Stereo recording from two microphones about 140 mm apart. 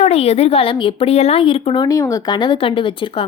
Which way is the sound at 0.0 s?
45° left (ahead or behind).